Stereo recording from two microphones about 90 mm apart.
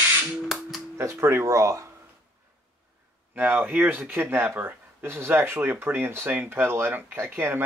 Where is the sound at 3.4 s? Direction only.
20° right (ahead or behind).